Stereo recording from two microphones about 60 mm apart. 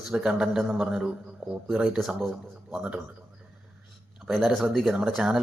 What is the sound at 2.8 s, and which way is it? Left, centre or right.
Speech, centre.